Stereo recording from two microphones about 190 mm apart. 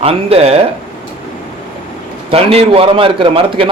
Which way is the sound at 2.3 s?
30° right (ahead or behind).